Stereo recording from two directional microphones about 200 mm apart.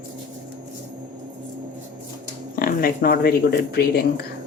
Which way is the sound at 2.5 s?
45° left (ahead or behind).